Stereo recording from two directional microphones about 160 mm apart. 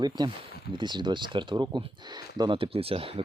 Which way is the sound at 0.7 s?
30° right (ahead or behind).